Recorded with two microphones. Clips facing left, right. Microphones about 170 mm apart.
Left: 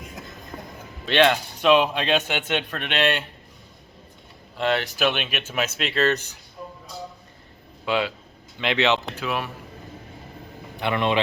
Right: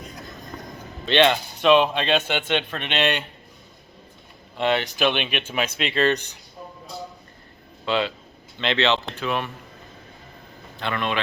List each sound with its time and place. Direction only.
1.0 s speech: 5° left (ahead or behind)
4.5 s speech: centre (ahead or behind)
7.9 s speech: 10° left (ahead or behind)
10.8 s speech: 20° left (ahead or behind)